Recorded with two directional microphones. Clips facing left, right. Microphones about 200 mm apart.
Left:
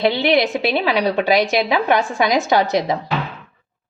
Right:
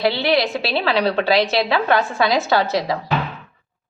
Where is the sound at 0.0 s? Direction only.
20° left (ahead or behind).